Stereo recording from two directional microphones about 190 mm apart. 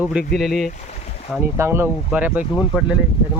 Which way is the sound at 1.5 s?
15° right (ahead or behind).